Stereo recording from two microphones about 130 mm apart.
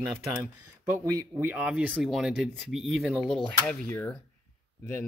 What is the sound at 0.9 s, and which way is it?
Speech, 15° right (ahead or behind).